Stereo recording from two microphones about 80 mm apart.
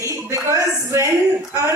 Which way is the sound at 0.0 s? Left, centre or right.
Right.